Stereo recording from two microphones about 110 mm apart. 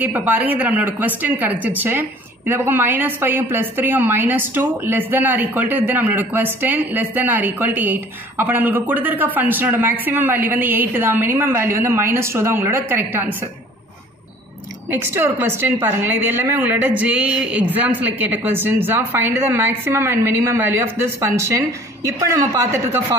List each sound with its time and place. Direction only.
0.0 s a woman's voice: 15° right (ahead or behind)
14.9 s a woman's voice: 20° right (ahead or behind)
22.3 s a woman's voice: 25° right (ahead or behind)